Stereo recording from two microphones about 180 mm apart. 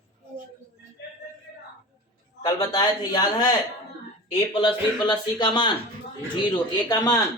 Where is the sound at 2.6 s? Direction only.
20° left (ahead or behind).